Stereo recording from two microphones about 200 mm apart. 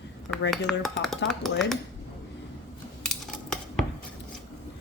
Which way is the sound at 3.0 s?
Centre (ahead or behind).